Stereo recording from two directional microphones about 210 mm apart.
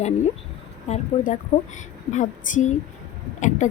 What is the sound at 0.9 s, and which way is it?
Speech, 35° left (ahead or behind).